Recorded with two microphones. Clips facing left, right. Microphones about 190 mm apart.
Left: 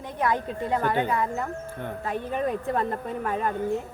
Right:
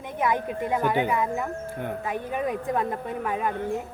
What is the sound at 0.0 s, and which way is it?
Speech, 15° right (ahead or behind).